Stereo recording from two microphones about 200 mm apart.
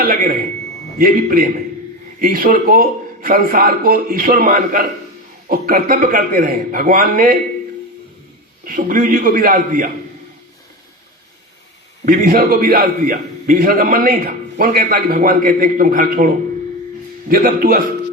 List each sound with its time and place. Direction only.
0.2 s a man's voice: 45° right (ahead or behind)
8.6 s a man's voice: 40° right (ahead or behind)
12.0 s a man's voice: 45° right (ahead or behind)